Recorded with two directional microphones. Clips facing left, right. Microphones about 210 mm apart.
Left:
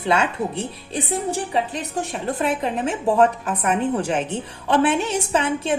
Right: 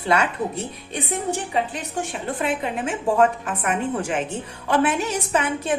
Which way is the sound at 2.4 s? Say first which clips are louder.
Left 2 dB; 40° left (ahead or behind).